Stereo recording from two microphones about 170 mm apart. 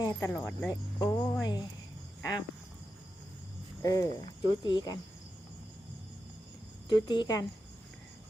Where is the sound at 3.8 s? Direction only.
20° left (ahead or behind).